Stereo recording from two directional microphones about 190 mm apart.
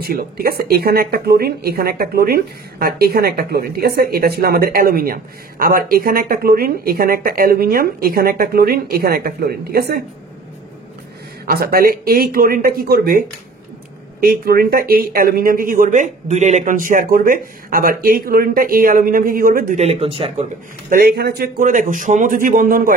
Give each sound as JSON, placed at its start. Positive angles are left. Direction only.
{"t": 0.0, "sound": "speech", "side_deg": -50}
{"t": 11.4, "sound": "speech", "side_deg": -55}
{"t": 14.2, "sound": "speech", "side_deg": -50}
{"t": 19.8, "sound": "speech", "side_deg": -35}
{"t": 20.9, "sound": "speech", "side_deg": -55}